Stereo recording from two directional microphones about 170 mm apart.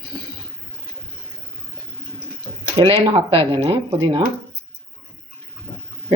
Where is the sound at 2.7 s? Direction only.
35° right (ahead or behind).